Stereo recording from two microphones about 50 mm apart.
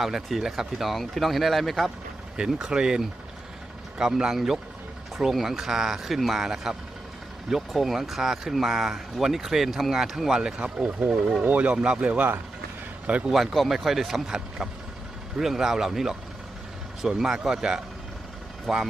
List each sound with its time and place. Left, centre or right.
0.0 s speech: centre
2.3 s speech: centre
4.2 s speech: centre; by 12.3 s right
13.2 s speech: centre
18.7 s speech: centre